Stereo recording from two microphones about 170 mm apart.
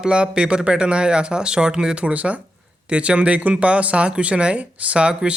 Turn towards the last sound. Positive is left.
turn(degrees=-5)  # may be behind; listen again after turning